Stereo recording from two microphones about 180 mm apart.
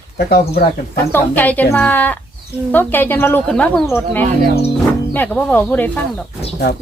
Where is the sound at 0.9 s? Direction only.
10° left (ahead or behind).